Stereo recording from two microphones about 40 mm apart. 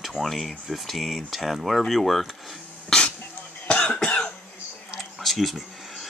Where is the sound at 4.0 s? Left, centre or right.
Left.